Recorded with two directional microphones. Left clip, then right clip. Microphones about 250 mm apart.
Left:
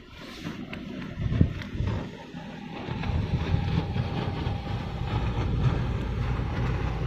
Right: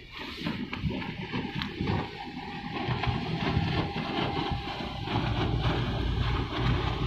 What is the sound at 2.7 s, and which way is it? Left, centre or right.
Vehicle, centre.